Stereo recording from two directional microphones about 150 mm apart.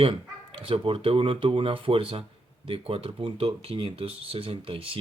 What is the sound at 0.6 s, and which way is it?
Speech, 40° right (ahead or behind).